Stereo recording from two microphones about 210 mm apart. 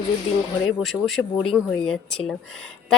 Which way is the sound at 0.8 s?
Centre (ahead or behind).